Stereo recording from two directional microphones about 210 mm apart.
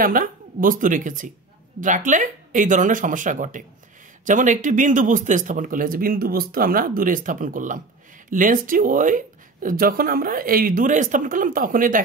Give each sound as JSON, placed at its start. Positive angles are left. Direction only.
{"t": 0.0, "sound": "speech", "side_deg": -40}